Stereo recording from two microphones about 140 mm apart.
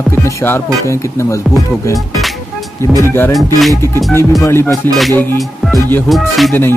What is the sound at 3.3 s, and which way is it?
Music, centre (ahead or behind).